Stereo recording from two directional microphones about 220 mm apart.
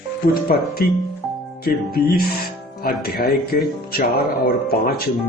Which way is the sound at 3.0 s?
45° left (ahead or behind).